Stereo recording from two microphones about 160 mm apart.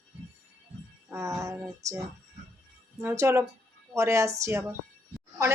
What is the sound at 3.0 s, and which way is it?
Speech, 15° right (ahead or behind).